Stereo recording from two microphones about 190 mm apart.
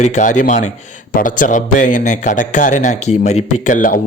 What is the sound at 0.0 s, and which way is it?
A man's voice, 40° left (ahead or behind).